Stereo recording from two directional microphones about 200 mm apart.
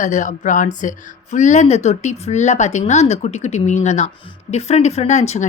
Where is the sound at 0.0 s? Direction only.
40° left (ahead or behind).